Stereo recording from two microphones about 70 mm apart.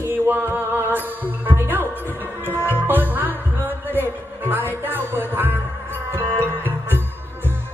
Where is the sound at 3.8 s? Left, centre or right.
Right.